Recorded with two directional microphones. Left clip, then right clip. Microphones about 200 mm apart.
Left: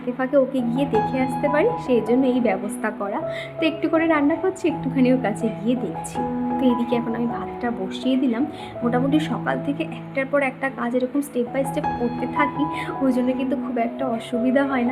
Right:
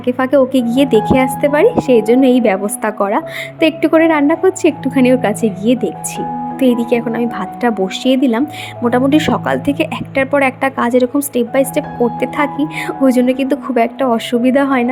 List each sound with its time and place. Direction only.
0.0 s speech: 45° right (ahead or behind)